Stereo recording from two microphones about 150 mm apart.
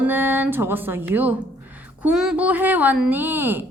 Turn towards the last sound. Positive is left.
turn(degrees=-15)  # may be behind; listen again after turning